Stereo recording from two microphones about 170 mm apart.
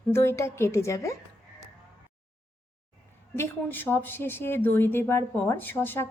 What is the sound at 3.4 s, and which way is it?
A woman's voice, 10° left (ahead or behind).